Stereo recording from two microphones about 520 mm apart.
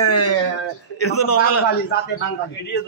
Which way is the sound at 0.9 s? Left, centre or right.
Left.